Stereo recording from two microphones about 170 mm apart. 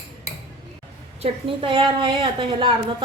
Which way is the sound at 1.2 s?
30° right (ahead or behind).